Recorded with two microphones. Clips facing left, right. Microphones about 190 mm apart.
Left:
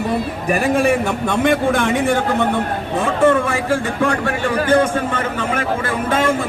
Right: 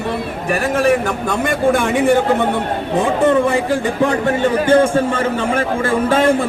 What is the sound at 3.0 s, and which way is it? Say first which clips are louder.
A man's voice: right 1 dB; 20° right (ahead or behind).